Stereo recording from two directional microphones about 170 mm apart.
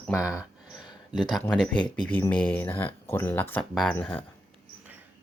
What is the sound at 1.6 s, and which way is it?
Speech, 5° left (ahead or behind).